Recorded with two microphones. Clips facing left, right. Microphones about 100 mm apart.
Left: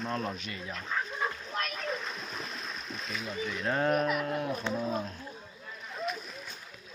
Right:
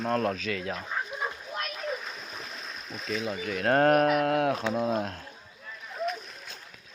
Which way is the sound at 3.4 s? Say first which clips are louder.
Right 7 dB; 70° right (ahead or behind).